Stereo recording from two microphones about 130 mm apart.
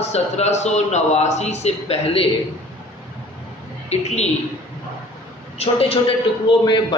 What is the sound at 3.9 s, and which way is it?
Speech, 60° left (ahead or behind).